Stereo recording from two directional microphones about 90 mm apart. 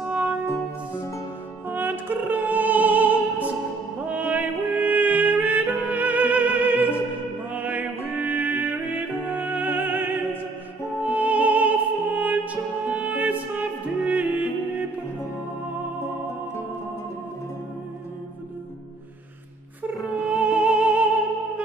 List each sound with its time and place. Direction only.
0.0 s music: 15° right (ahead or behind)
1.7 s music: 20° right (ahead or behind)
20.2 s music: 15° right (ahead or behind)